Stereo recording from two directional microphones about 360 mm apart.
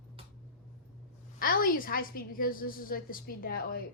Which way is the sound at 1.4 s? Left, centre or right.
Left.